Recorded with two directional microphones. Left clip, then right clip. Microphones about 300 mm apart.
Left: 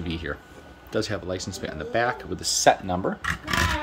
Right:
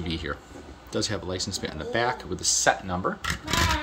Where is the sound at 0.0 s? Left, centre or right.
Centre.